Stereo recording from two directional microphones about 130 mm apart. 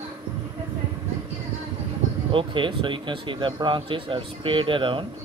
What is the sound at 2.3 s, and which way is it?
Speech, 40° right (ahead or behind).